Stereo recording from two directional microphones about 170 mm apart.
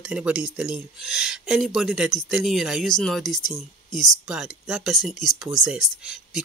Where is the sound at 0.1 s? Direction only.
5° right (ahead or behind).